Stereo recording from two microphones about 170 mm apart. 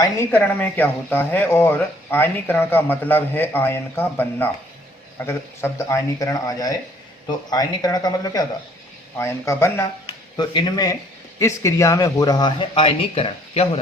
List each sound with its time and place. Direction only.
0.0 s speech: 15° left (ahead or behind)
10.1 s speech: 25° left (ahead or behind)